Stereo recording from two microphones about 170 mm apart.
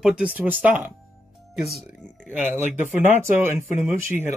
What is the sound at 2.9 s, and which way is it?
Speech, 15° right (ahead or behind).